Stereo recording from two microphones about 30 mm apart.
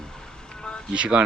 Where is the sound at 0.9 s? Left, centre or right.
Right.